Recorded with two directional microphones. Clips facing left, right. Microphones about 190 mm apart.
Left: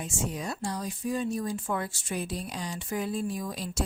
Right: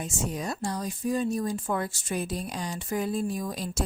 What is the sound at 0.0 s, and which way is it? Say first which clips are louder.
A woman's voice: right 2 dB; 40° right (ahead or behind).